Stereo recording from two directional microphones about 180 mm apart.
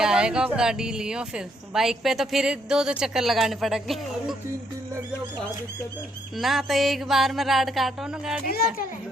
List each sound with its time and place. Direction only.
0.0 s a woman's voice: 5° right (ahead or behind)
6.3 s a woman's voice: centre (ahead or behind)